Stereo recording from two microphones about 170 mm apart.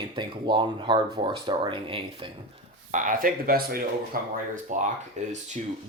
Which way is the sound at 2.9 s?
50° right (ahead or behind).